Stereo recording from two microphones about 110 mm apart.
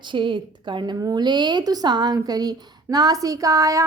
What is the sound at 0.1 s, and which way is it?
A woman's voice, 50° right (ahead or behind).